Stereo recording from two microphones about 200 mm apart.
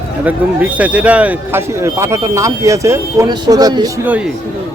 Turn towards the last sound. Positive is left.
turn(degrees=-20)  # may be behind; listen again after turning